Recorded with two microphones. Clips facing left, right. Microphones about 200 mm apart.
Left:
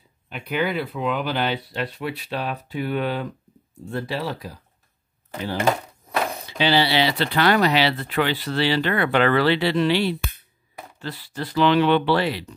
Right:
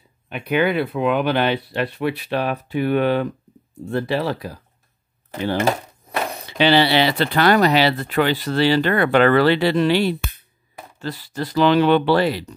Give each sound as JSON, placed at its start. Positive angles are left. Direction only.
{"t": 0.3, "sound": "speech", "side_deg": -65}
{"t": 6.6, "sound": "speech", "side_deg": -60}